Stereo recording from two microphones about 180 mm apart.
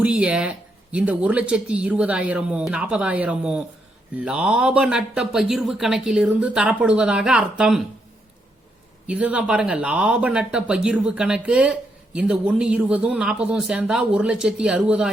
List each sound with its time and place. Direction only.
0.0 s speech: 5° right (ahead or behind)
9.0 s speech: 5° right (ahead or behind)